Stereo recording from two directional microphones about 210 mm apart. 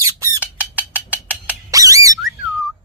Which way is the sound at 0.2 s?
5° right (ahead or behind).